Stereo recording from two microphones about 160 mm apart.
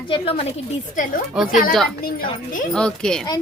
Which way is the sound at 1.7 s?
Centre (ahead or behind).